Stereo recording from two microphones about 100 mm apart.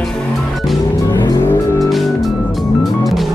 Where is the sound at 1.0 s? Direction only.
40° left (ahead or behind).